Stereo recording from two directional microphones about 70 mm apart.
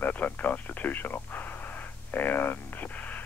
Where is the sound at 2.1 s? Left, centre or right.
Left.